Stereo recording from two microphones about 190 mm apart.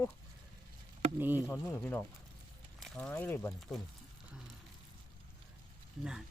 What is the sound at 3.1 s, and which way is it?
Speech, 10° left (ahead or behind).